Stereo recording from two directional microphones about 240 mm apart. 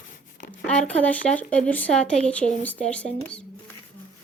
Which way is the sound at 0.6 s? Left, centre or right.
Centre.